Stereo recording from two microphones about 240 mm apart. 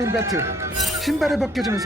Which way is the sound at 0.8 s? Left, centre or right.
Centre.